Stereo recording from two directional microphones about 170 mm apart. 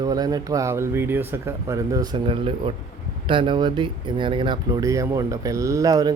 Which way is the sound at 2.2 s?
30° right (ahead or behind).